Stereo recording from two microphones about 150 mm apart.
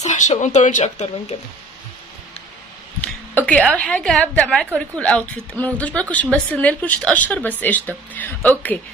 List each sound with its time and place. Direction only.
0.0 s speech: 50° left (ahead or behind)
3.0 s a sound: 10° left (ahead or behind)
3.7 s a woman's voice: 5° left (ahead or behind)